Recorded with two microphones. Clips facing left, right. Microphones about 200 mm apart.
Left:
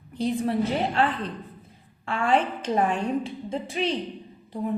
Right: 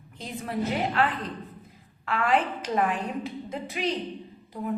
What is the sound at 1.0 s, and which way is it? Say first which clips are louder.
A woman's voice: left 2 dB; 30° left (ahead or behind).